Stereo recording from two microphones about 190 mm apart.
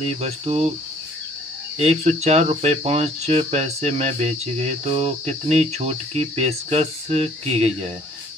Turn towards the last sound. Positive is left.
turn(degrees=-35)  # may be behind; listen again after turning